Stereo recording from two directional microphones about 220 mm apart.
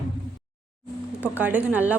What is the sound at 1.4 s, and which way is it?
Speech, 5° right (ahead or behind).